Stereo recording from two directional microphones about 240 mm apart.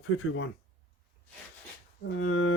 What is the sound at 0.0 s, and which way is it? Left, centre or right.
Speech, left.